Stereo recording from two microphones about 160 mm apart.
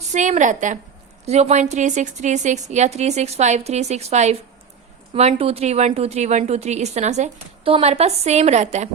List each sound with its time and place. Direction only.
0.1 s speech: 50° right (ahead or behind)